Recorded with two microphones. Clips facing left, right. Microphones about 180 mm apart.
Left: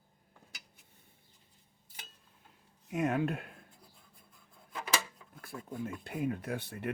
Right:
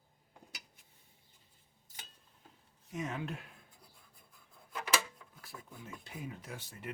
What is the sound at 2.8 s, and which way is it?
Speech, 60° left (ahead or behind).